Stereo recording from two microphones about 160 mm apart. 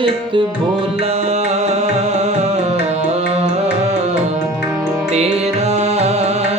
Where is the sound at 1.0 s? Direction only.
40° right (ahead or behind).